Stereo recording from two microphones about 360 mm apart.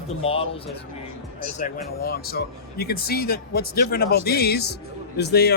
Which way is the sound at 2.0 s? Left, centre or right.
Left.